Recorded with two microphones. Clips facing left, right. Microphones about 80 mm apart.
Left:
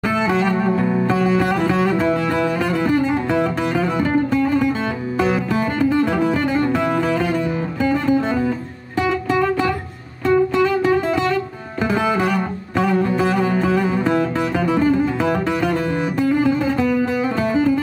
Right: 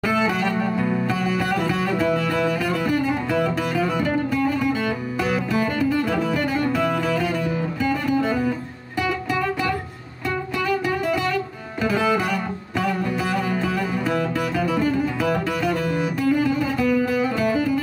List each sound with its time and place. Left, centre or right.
0.1 s music: left